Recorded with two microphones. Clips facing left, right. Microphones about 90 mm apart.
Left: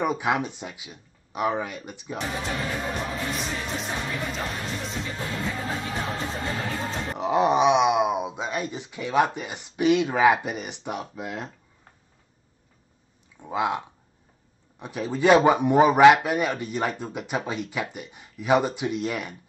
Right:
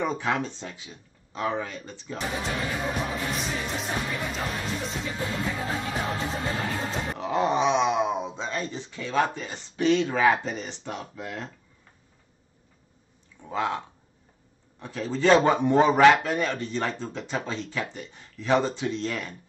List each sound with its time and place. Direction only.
0.0 s speech: 15° left (ahead or behind)
2.1 s speech: centre (ahead or behind)
7.2 s speech: 20° left (ahead or behind)
13.4 s speech: 15° left (ahead or behind)